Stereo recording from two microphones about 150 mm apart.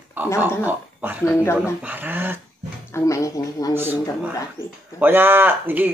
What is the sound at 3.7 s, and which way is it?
Speech, 15° right (ahead or behind).